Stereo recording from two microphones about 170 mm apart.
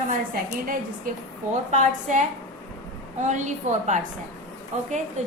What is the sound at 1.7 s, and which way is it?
A woman's voice, 45° right (ahead or behind).